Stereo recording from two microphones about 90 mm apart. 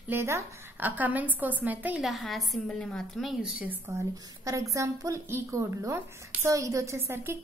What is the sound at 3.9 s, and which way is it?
A woman's voice, 35° right (ahead or behind).